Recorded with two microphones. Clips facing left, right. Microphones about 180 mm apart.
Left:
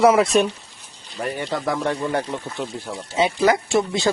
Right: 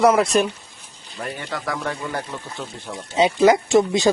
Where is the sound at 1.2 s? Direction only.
15° left (ahead or behind).